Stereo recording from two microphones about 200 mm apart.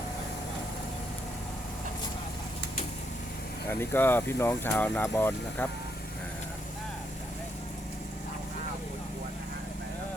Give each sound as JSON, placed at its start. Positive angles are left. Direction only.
{"t": 3.7, "sound": "speech", "side_deg": 10}